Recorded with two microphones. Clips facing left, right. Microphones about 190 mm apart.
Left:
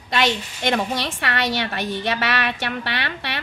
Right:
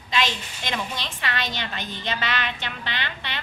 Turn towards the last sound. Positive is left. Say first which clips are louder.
# left 5 dB
turn(degrees=65)  # may be behind; listen again after turning